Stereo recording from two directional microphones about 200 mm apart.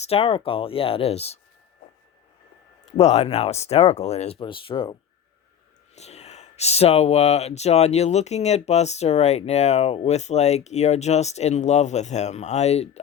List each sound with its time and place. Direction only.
0.0 s speech: 30° left (ahead or behind)
3.0 s speech: 30° left (ahead or behind)
6.0 s speech: 30° left (ahead or behind)